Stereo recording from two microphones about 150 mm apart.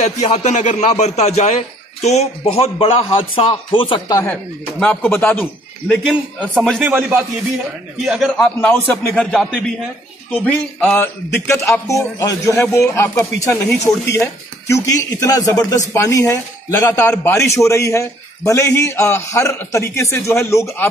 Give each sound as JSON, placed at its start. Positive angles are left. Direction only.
{"t": 0.0, "sound": "a man's voice", "side_deg": 50}
{"t": 4.3, "sound": "a man's voice", "side_deg": 10}
{"t": 6.8, "sound": "a man's voice", "side_deg": -15}
{"t": 8.0, "sound": "a man's voice", "side_deg": 0}
{"t": 8.5, "sound": "a man's voice", "side_deg": 15}